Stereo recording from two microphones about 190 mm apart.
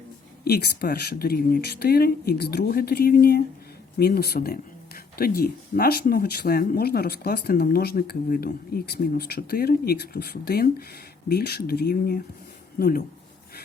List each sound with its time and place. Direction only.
0.4 s speech: 55° left (ahead or behind)